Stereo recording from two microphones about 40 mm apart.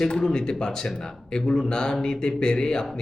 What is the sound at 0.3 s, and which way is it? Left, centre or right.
Speech, centre.